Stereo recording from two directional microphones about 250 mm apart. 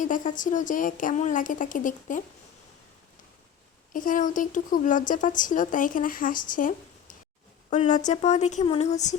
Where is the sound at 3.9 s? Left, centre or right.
Left.